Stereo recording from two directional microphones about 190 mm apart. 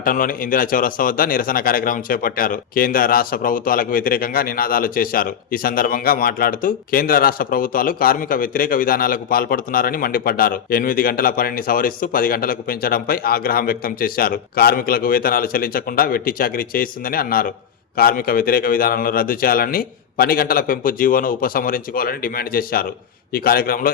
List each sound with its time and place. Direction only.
0.0 s speech: 45° left (ahead or behind)